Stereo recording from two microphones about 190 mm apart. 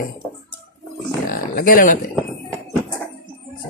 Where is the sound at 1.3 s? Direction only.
50° left (ahead or behind).